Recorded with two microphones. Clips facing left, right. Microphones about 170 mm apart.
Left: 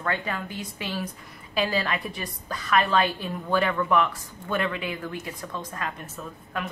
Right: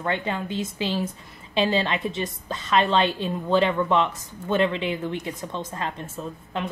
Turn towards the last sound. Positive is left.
turn(degrees=-25)  # may be behind; listen again after turning